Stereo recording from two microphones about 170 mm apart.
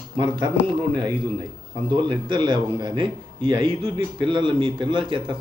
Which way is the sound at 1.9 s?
25° right (ahead or behind).